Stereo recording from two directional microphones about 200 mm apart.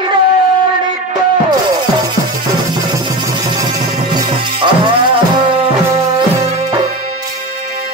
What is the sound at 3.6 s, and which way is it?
Music, 20° right (ahead or behind).